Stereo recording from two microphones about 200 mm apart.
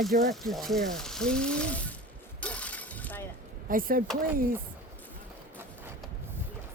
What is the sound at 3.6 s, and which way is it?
Speech, 45° right (ahead or behind).